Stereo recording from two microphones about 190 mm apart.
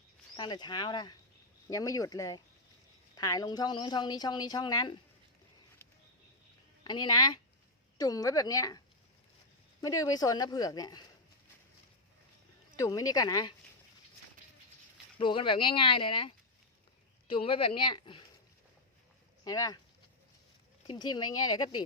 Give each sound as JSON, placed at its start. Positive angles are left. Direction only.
{"t": 0.3, "sound": "a woman's voice", "side_deg": 25}
{"t": 6.8, "sound": "a woman's voice", "side_deg": 25}
{"t": 9.8, "sound": "a woman's voice", "side_deg": 20}
{"t": 12.7, "sound": "a woman's voice", "side_deg": 20}
{"t": 15.2, "sound": "a woman's voice", "side_deg": 25}
{"t": 19.5, "sound": "a woman's voice", "side_deg": 20}
{"t": 20.8, "sound": "a woman's voice", "side_deg": 25}